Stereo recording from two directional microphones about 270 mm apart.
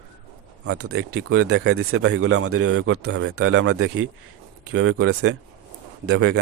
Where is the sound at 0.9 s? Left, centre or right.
Right.